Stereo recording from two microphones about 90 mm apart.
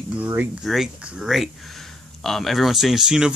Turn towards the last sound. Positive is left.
turn(degrees=-5)  # may be behind; listen again after turning